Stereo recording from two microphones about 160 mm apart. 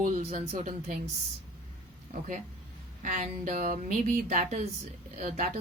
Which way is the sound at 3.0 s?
55° right (ahead or behind).